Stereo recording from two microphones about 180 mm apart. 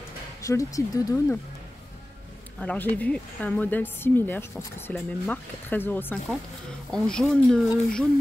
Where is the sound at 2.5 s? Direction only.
10° left (ahead or behind).